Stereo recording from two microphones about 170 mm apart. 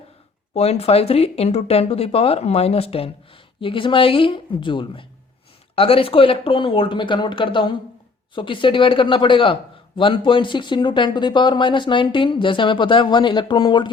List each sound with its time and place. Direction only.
0.5 s speech: 40° left (ahead or behind)